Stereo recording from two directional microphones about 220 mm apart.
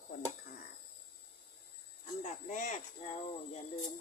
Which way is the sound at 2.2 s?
35° left (ahead or behind).